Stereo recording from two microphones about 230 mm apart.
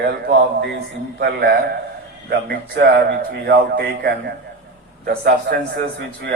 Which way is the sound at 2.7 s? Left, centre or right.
Right.